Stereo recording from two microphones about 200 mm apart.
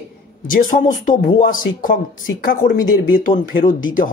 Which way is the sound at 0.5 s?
45° left (ahead or behind).